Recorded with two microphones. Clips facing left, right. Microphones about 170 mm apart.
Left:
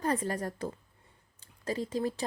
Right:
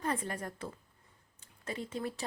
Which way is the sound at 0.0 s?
40° left (ahead or behind).